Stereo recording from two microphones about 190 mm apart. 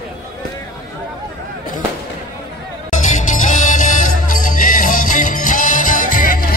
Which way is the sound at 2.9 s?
40° left (ahead or behind).